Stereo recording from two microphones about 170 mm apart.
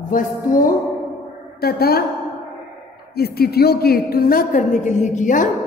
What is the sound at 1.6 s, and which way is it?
Speech, 65° left (ahead or behind).